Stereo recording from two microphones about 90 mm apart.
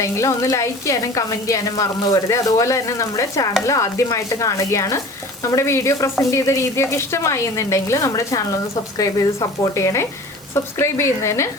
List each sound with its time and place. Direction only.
0.0 s speech: 35° left (ahead or behind)
9.7 s speech: 35° left (ahead or behind)